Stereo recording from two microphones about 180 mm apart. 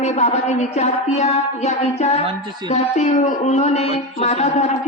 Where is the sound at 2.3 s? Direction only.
25° right (ahead or behind).